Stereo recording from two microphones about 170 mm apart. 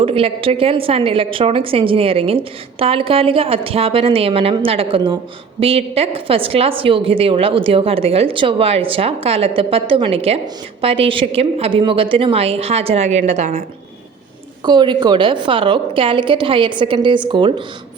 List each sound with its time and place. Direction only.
0.0 s a woman's voice: 35° right (ahead or behind)
14.6 s a woman's voice: 25° right (ahead or behind)